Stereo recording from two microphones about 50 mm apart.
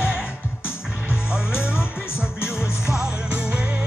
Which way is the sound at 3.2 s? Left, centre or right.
Right.